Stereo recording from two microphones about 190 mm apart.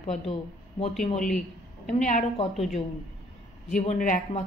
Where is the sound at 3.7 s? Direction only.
40° left (ahead or behind).